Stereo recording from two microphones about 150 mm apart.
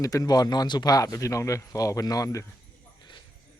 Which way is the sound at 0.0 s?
25° left (ahead or behind).